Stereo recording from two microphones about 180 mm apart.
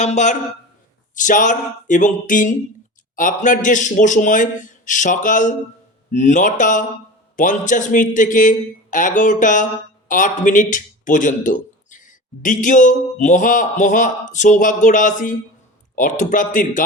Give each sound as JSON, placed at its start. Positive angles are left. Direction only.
{"t": 0.0, "sound": "speech", "side_deg": 40}